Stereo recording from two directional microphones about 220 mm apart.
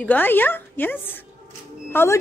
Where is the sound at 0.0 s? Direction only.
10° left (ahead or behind).